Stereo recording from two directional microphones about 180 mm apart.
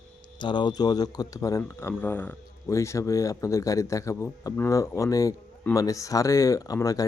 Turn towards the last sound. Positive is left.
turn(degrees=20)  # may be behind; listen again after turning